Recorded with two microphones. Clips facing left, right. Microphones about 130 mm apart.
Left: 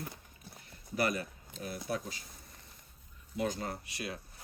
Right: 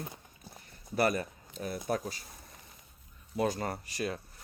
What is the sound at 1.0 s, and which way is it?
Speech, 40° right (ahead or behind).